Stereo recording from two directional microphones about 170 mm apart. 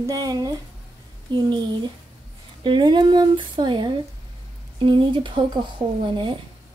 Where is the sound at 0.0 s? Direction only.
20° right (ahead or behind).